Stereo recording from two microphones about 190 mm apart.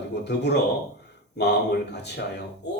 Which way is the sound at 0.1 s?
65° left (ahead or behind).